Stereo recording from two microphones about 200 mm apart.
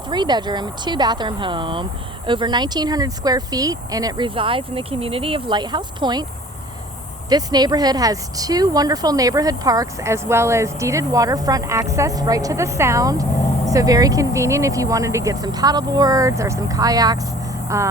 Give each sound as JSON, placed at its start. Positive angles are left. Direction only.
{"t": 0.1, "sound": "speech", "side_deg": -20}
{"t": 7.3, "sound": "speech", "side_deg": -20}